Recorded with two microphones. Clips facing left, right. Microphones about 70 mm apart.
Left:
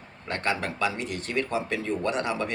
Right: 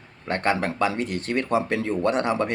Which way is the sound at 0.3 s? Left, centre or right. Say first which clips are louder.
Right 5 dB; right.